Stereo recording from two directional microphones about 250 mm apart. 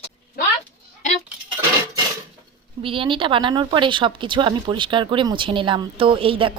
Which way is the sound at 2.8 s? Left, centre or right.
Right.